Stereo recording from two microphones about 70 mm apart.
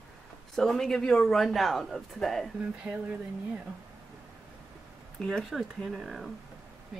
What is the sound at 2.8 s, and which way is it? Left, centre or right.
Speech, centre.